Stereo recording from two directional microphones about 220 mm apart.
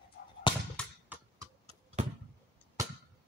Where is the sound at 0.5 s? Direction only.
20° left (ahead or behind).